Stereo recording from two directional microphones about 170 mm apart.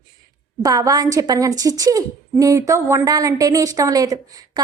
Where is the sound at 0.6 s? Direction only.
20° right (ahead or behind).